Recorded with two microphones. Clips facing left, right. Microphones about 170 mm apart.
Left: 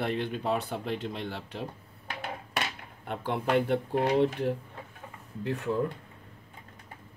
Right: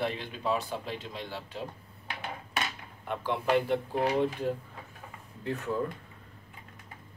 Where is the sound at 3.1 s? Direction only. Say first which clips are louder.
Even; 55° left (ahead or behind).